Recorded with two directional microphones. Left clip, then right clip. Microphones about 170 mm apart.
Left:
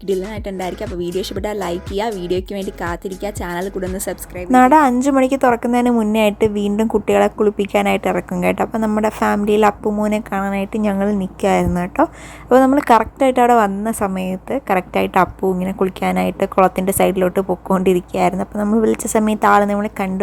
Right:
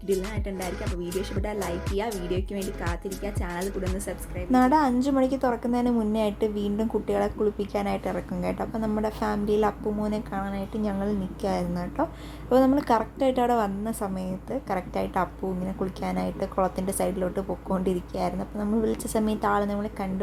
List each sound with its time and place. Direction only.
0.4 s a woman's voice: 50° left (ahead or behind)
7.2 s a woman's voice: 55° left (ahead or behind)
12.5 s a woman's voice: 40° left (ahead or behind)